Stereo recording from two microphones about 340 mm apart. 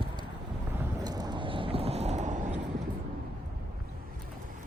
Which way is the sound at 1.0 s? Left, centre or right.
Centre.